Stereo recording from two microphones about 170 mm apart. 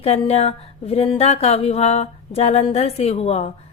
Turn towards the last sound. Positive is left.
turn(degrees=40)  # may be behind; listen again after turning